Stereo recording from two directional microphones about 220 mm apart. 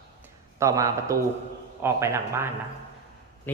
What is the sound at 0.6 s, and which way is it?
Speech, 15° right (ahead or behind).